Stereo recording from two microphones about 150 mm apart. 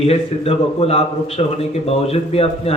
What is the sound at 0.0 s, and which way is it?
A man's voice, 40° left (ahead or behind).